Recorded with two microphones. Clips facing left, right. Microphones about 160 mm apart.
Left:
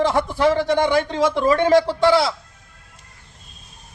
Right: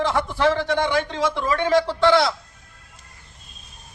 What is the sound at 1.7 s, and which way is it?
Speech, 15° left (ahead or behind).